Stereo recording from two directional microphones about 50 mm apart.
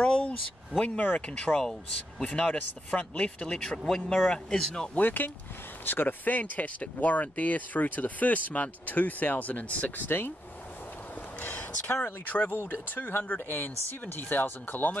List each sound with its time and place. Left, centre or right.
0.0 s speech: left
1.6 s speech: centre
2.2 s speech: left; by 4.9 s centre
4.9 s speech: left
11.3 s a sound: left
12.0 s speech: left